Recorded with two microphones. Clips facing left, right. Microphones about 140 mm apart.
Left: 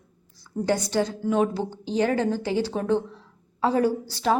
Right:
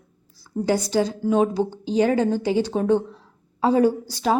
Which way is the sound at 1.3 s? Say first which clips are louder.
Right 4 dB; 20° right (ahead or behind).